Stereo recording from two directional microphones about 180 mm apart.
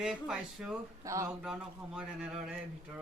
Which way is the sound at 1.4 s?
5° right (ahead or behind).